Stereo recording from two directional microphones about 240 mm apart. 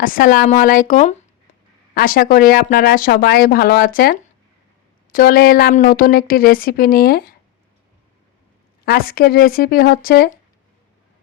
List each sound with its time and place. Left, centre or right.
0.0 s speech: left
8.8 s speech: left